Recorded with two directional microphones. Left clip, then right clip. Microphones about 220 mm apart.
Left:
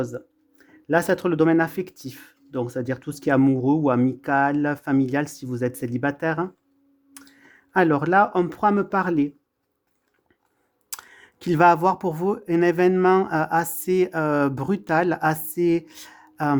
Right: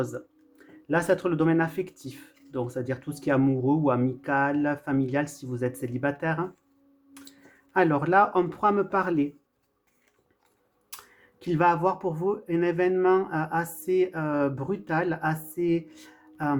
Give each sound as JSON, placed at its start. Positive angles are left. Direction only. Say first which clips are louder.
{"t": 0.6, "sound": "speech", "louder": "left 5 dB", "side_deg": 40}
{"t": 10.8, "sound": "speech", "louder": "left 7 dB", "side_deg": 50}